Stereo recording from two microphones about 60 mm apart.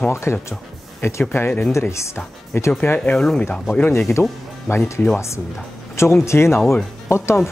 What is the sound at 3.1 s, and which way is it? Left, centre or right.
Speech, centre.